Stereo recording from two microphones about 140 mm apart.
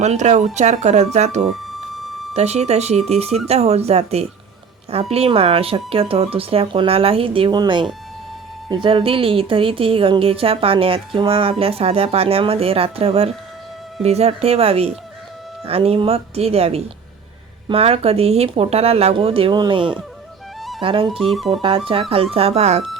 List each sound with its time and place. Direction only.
0.0 s a woman's voice: 55° right (ahead or behind); by 20.0 s 35° right (ahead or behind)
20.6 s music: centre (ahead or behind)
20.8 s speech: 40° right (ahead or behind)
21.2 s music: centre (ahead or behind)
22.1 s speech: 45° right (ahead or behind)